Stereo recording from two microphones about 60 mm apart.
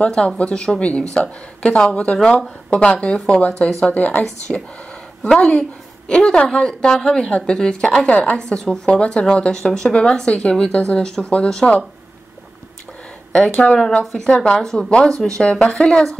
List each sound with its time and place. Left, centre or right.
0.0 s a woman's voice: centre
5.2 s a woman's voice: centre
13.3 s a woman's voice: centre